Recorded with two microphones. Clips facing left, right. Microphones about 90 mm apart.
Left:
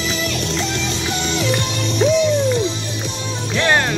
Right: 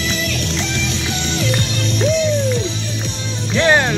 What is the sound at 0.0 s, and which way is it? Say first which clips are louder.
Music: even; 25° left (ahead or behind).